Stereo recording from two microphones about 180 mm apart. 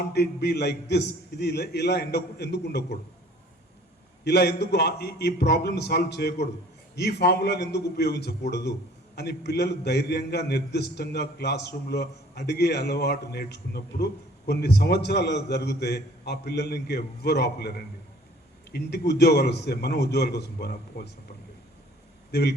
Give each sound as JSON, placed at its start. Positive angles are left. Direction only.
{"t": 0.1, "sound": "a man's voice", "side_deg": 65}
{"t": 4.2, "sound": "a man's voice", "side_deg": 65}
{"t": 18.7, "sound": "a man's voice", "side_deg": 65}
{"t": 22.3, "sound": "a man's voice", "side_deg": 65}